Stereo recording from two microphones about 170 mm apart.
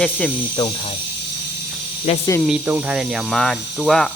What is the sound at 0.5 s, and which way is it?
Speech, 25° left (ahead or behind).